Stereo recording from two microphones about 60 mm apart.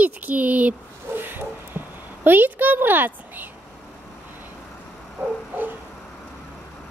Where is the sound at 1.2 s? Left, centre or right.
Right.